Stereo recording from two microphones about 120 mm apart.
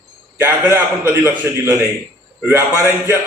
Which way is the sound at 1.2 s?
15° right (ahead or behind).